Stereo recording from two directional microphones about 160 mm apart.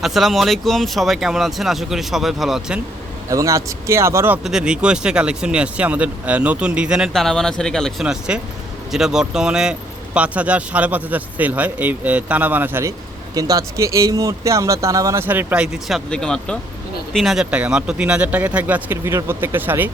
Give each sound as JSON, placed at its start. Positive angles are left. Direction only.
{"t": 0.0, "sound": "speech", "side_deg": 0}
{"t": 3.2, "sound": "speech", "side_deg": -20}
{"t": 4.4, "sound": "speech", "side_deg": -5}
{"t": 16.0, "sound": "speech", "side_deg": 5}